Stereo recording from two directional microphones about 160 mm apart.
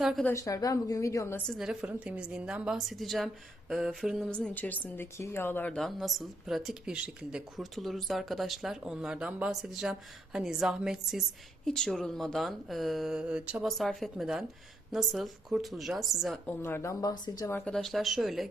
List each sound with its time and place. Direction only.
0.0 s a woman's voice: 5° right (ahead or behind)
0.3 s speech: 20° left (ahead or behind)
1.5 s speech: centre (ahead or behind)
16.5 s speech: 15° left (ahead or behind)
17.7 s speech: centre (ahead or behind)